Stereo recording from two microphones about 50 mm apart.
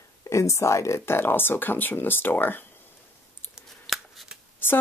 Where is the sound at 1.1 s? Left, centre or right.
Left.